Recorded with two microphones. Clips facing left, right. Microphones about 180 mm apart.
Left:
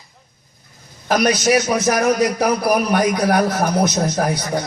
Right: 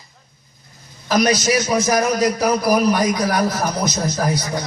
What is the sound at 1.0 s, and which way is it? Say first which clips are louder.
A man's voice: left 1 dB; 60° left (ahead or behind).